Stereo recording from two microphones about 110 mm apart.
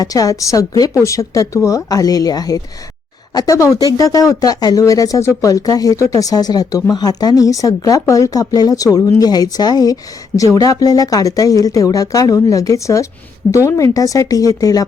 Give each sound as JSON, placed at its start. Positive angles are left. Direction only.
{"t": 0.0, "sound": "speech", "side_deg": 35}